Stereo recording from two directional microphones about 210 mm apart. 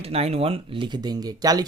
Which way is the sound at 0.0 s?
30° right (ahead or behind).